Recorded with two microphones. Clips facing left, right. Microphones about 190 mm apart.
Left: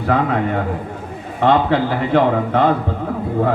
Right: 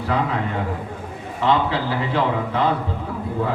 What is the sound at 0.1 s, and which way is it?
A man's voice, 55° left (ahead or behind).